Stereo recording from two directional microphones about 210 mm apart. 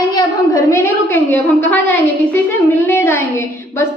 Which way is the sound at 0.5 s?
15° left (ahead or behind).